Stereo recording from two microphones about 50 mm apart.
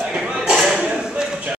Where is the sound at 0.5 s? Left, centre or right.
Centre.